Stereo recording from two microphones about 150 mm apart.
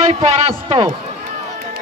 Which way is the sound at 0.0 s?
45° right (ahead or behind).